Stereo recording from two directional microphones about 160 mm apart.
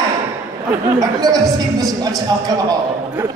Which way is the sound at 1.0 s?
25° right (ahead or behind).